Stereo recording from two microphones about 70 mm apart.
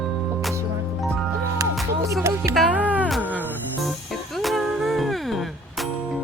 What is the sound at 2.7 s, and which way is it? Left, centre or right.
Music, right.